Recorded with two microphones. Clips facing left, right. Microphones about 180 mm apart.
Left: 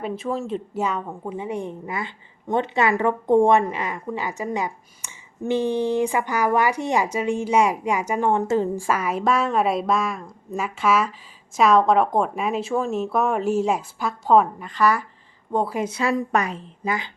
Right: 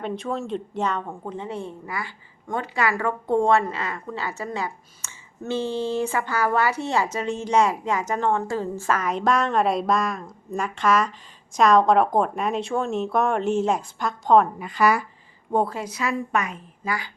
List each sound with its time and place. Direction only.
0.0 s a woman's voice: centre (ahead or behind)
14.6 s speech: 10° right (ahead or behind)
15.7 s a woman's voice: 25° left (ahead or behind)
16.8 s speech: 20° left (ahead or behind)